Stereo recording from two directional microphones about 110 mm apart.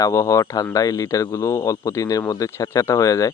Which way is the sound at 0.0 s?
30° left (ahead or behind).